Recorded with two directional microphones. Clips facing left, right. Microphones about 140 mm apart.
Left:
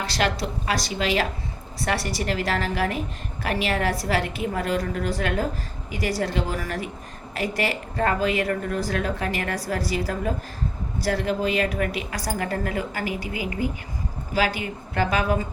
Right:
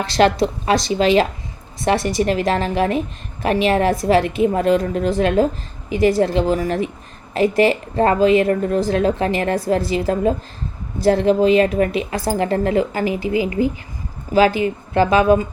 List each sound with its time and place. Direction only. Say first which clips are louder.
0.0 s a woman's voice: right 10 dB; 25° right (ahead or behind)